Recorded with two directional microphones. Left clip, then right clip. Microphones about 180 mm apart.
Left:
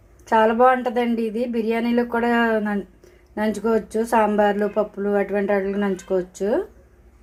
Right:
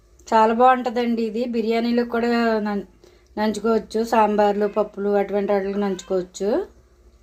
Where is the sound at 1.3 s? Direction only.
Centre (ahead or behind).